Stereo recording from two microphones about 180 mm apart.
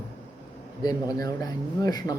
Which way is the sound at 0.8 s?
20° left (ahead or behind).